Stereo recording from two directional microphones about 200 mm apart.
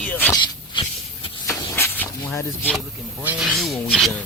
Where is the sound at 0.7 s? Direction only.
25° left (ahead or behind).